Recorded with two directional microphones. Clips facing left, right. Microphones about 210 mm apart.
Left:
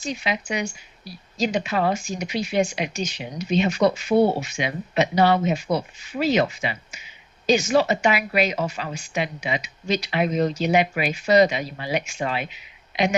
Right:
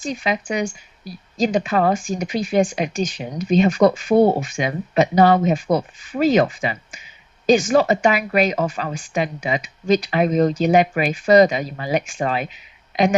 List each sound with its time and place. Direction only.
0.0 s a woman's voice: 50° right (ahead or behind)